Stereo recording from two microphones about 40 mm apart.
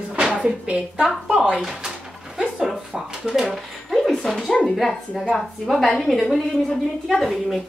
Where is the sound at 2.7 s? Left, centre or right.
Centre.